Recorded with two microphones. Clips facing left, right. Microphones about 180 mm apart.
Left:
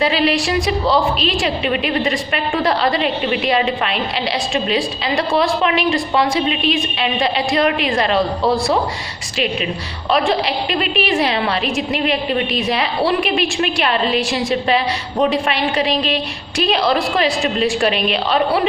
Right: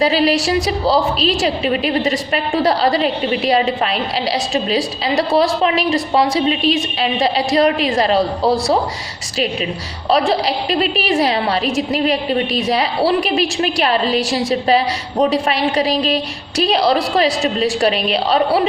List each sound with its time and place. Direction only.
0.0 s a woman's voice: 35° right (ahead or behind)
10.1 s a woman's voice: 35° right (ahead or behind)